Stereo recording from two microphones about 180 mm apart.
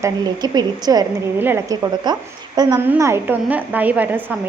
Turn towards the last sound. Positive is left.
turn(degrees=-10)  # may be behind; listen again after turning